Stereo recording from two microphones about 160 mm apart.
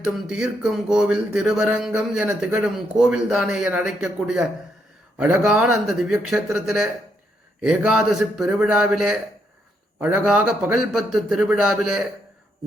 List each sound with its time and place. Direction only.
0.3 s speech: 5° right (ahead or behind)